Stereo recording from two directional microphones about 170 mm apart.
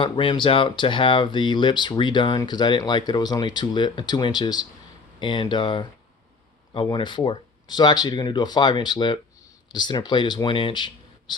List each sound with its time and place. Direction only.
0.0 s speech: 30° left (ahead or behind)